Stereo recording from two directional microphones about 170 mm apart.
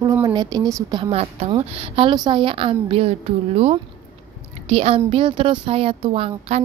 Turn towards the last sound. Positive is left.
turn(degrees=-35)  # may be behind; listen again after turning